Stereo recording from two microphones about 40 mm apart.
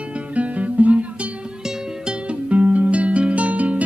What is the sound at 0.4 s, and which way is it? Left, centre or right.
Music, right.